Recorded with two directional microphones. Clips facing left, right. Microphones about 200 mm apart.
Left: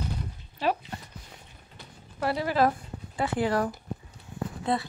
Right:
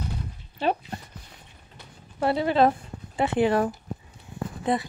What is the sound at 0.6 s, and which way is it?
Speech, 30° right (ahead or behind).